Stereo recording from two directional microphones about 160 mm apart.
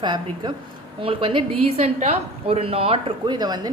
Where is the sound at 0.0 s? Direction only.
30° right (ahead or behind).